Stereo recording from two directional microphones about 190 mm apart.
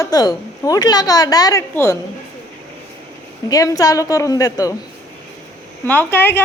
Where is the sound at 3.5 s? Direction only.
20° left (ahead or behind).